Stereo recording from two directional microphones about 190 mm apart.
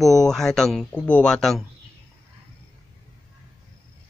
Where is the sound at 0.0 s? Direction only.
Centre (ahead or behind).